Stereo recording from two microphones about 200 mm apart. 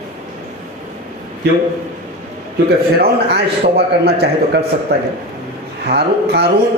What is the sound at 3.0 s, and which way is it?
A man's voice, 55° right (ahead or behind).